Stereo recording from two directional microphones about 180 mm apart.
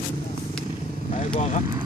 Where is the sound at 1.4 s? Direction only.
40° left (ahead or behind).